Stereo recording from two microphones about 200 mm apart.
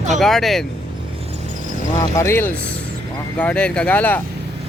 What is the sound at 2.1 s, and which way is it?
Speech, 10° left (ahead or behind).